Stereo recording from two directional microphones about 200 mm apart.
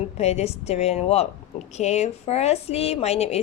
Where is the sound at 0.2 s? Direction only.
35° left (ahead or behind).